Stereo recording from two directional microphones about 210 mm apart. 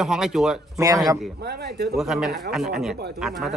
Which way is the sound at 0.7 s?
15° right (ahead or behind).